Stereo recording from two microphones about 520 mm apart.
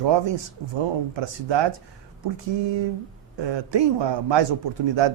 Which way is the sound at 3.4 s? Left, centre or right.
Right.